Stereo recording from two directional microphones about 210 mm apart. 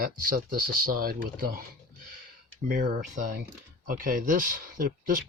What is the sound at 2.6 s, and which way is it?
Speech, 40° right (ahead or behind).